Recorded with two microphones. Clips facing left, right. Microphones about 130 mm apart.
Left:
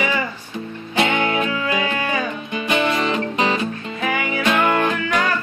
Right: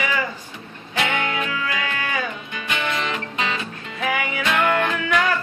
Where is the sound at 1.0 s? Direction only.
25° left (ahead or behind).